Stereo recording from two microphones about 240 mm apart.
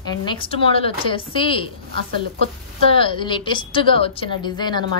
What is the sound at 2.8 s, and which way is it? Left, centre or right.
A woman's voice, left.